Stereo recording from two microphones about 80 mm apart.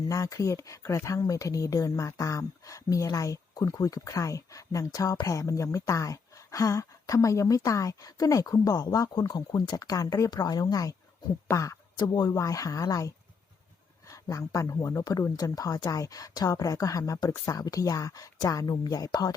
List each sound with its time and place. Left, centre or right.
0.1 s speech: left